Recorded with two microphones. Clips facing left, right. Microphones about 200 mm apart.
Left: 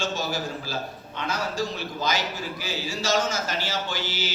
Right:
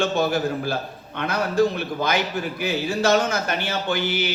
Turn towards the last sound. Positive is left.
turn(degrees=-60)  # may be behind; listen again after turning